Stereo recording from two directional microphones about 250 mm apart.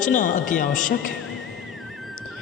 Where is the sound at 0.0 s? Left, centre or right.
Left.